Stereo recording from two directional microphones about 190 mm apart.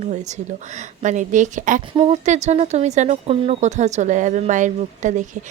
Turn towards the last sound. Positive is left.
turn(degrees=-40)  # may be behind; listen again after turning